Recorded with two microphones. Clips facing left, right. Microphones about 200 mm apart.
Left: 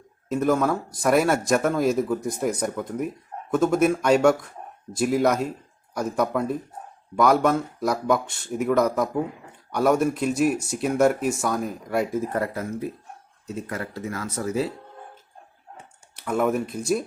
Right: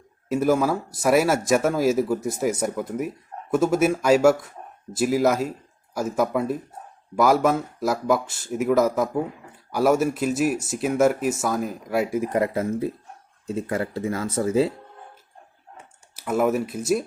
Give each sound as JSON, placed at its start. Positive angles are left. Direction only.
{"t": 0.3, "sound": "speech", "side_deg": -5}
{"t": 16.1, "sound": "speech", "side_deg": -5}